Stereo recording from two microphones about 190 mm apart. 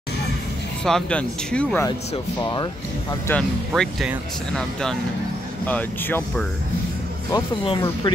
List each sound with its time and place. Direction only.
0.8 s speech: 5° left (ahead or behind)
2.4 s speech: 20° left (ahead or behind)
3.3 s speech: 5° left (ahead or behind)
5.7 s speech: 10° left (ahead or behind)
7.3 s speech: 25° left (ahead or behind)